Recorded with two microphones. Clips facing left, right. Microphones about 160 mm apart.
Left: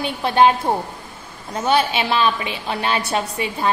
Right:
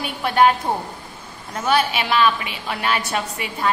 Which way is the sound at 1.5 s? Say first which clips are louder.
Left 1 dB; 25° left (ahead or behind).